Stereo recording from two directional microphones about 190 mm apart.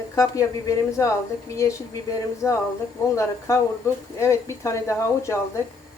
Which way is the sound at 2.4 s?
15° left (ahead or behind).